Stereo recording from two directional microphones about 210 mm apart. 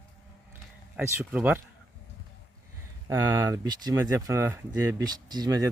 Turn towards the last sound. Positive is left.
turn(degrees=-20)  # may be behind; listen again after turning